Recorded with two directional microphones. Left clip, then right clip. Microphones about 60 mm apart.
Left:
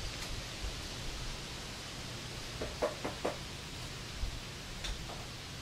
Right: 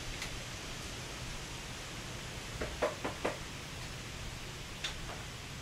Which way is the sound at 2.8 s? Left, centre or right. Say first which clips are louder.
Right 1 dB; right.